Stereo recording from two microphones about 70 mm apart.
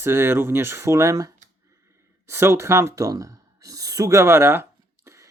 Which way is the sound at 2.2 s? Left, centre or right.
Right.